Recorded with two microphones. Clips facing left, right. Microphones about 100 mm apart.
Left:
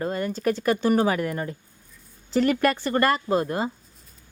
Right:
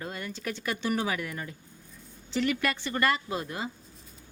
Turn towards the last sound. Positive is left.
turn(degrees=45)  # may be behind; listen again after turning